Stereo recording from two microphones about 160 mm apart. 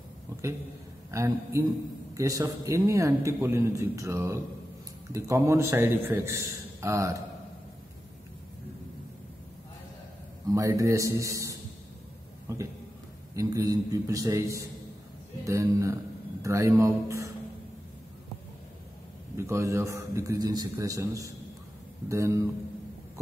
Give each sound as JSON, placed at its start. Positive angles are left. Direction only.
{"t": 1.1, "sound": "a man's voice", "side_deg": -20}
{"t": 10.5, "sound": "a man's voice", "side_deg": -20}
{"t": 19.3, "sound": "a man's voice", "side_deg": -15}